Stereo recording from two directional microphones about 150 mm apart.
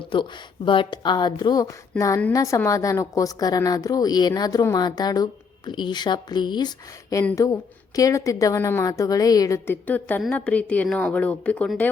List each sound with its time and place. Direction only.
0.1 s a woman's voice: 35° left (ahead or behind)
9.8 s a woman's voice: 10° left (ahead or behind)